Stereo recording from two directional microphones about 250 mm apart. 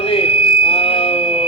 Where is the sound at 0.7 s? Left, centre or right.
Left.